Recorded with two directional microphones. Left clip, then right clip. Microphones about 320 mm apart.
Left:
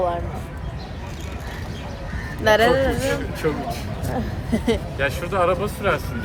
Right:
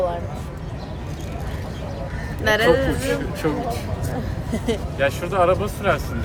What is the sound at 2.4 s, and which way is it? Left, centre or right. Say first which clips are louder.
Speech: left 1 dB; centre.